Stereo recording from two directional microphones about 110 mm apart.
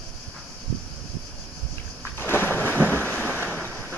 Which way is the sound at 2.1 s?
20° left (ahead or behind).